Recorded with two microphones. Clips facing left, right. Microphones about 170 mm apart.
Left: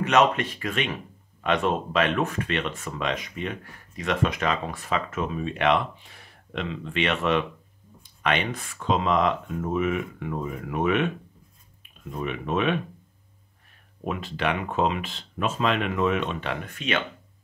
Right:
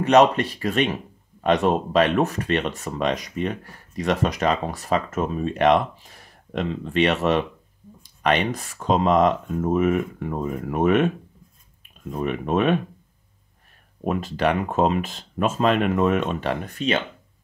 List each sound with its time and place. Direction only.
0.0 s speech: 35° right (ahead or behind)
12.1 s speech: 45° right (ahead or behind)
14.0 s speech: 40° right (ahead or behind)